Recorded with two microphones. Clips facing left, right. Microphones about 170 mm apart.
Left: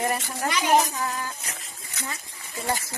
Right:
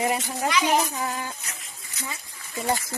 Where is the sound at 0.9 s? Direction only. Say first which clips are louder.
Even; 25° right (ahead or behind).